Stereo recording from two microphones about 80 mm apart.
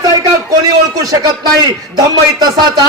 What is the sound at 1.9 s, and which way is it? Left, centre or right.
Speech, right.